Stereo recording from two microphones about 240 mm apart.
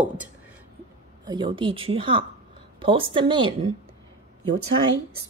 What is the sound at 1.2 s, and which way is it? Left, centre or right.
A woman's voice, centre.